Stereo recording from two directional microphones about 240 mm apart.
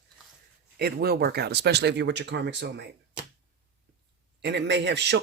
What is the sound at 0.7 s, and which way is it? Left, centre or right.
A man's voice, right.